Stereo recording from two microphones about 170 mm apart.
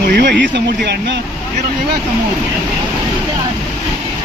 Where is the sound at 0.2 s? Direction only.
75° right (ahead or behind).